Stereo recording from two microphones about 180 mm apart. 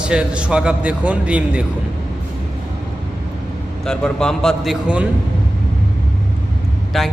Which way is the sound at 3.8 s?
5° left (ahead or behind).